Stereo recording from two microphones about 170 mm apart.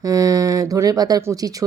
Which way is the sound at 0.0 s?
20° right (ahead or behind).